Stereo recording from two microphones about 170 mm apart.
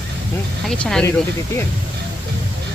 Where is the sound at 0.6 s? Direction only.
5° left (ahead or behind).